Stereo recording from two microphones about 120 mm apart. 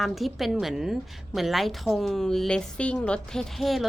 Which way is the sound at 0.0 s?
Centre (ahead or behind).